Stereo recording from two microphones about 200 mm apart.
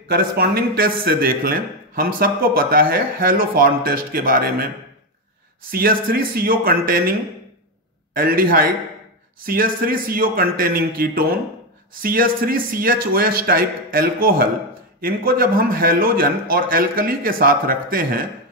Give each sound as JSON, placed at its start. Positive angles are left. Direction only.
{"t": 0.1, "sound": "a man's voice", "side_deg": -50}
{"t": 5.7, "sound": "a man's voice", "side_deg": -50}
{"t": 8.1, "sound": "a man's voice", "side_deg": -45}